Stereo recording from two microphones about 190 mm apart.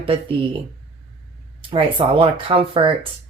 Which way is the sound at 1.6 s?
30° right (ahead or behind).